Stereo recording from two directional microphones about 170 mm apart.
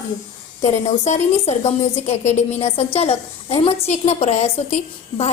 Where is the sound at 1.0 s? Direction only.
40° left (ahead or behind).